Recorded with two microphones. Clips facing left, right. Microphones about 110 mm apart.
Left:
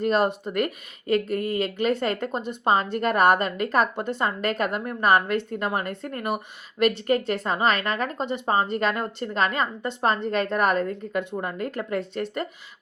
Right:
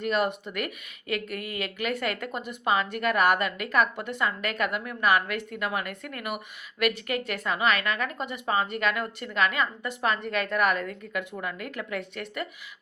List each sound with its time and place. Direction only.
0.0 s speech: 35° left (ahead or behind)